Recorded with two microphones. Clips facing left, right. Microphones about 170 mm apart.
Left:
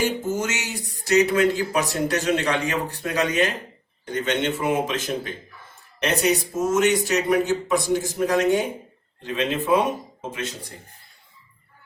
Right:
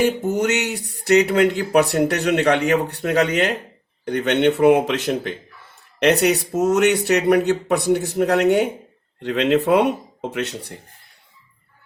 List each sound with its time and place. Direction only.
0.0 s speech: 60° right (ahead or behind)